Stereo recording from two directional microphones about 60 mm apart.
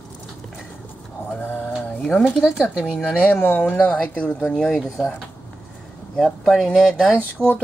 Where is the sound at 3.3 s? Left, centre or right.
Left; by 5.1 s centre.